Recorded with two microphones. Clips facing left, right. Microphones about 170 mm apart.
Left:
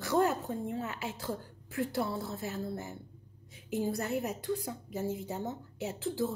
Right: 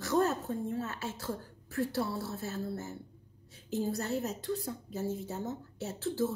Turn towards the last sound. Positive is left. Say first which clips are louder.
# right 1 dB
turn(degrees=15)  # may be behind; listen again after turning